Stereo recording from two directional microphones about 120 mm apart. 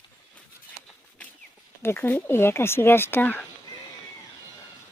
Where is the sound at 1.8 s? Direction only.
20° left (ahead or behind).